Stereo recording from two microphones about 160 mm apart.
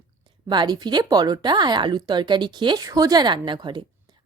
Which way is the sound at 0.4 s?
25° right (ahead or behind).